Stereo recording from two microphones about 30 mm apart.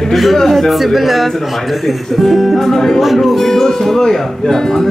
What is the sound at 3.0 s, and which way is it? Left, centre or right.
Speech, centre.